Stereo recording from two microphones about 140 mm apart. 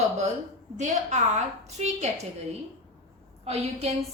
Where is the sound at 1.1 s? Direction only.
55° right (ahead or behind).